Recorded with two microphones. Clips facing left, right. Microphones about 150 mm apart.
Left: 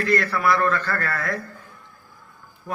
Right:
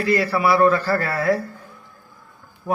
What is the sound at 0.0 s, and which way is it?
Speech, 5° right (ahead or behind).